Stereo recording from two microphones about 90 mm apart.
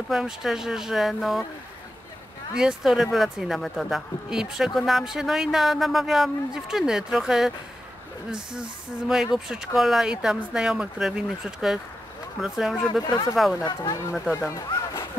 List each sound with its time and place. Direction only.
0.1 s speech: 5° right (ahead or behind)
2.5 s speech: 5° right (ahead or behind)
13.0 s speech: 50° left (ahead or behind)
13.4 s speech: 5° right (ahead or behind)
14.3 s a sound: 35° left (ahead or behind)